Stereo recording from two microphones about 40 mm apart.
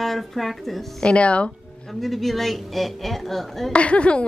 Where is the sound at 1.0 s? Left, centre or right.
Left.